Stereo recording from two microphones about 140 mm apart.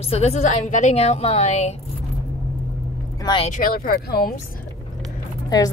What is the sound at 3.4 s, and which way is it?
Speech, 75° left (ahead or behind).